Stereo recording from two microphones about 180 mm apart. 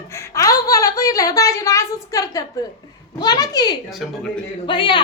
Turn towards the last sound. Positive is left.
turn(degrees=25)  # may be behind; listen again after turning